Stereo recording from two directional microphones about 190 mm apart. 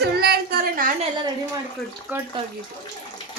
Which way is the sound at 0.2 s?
55° right (ahead or behind).